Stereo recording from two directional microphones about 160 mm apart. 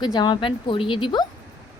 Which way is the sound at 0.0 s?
25° left (ahead or behind).